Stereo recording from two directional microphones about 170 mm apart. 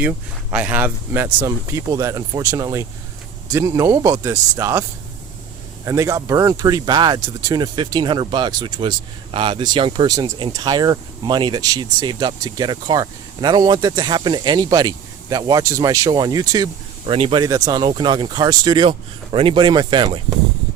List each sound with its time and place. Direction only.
0.5 s speech: 10° right (ahead or behind)
17.1 s speech: 35° right (ahead or behind)